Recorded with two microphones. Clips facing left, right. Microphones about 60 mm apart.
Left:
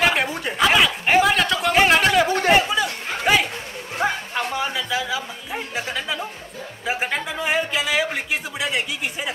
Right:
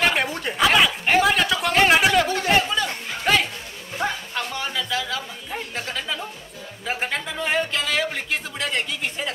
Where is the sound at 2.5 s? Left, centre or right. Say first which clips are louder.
Left 3 dB; centre.